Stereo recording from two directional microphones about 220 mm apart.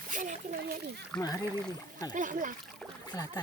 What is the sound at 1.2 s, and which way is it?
Speech, 15° left (ahead or behind).